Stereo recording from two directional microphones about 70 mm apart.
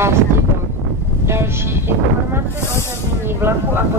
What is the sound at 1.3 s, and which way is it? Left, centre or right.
Speech, right.